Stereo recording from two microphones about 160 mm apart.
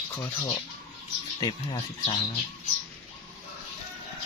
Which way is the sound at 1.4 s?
30° left (ahead or behind).